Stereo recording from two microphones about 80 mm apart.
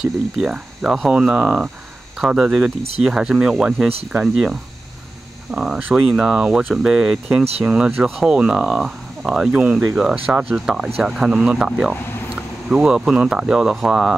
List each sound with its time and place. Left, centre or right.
0.0 s speech: centre